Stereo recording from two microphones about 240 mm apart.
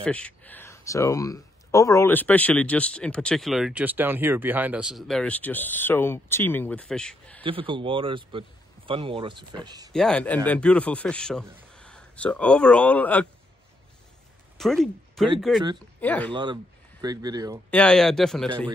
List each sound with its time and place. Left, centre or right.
0.0 s speech: centre
7.4 s a man's voice: right
9.9 s speech: centre
14.6 s speech: centre
17.0 s speech: centre
17.6 s speech: centre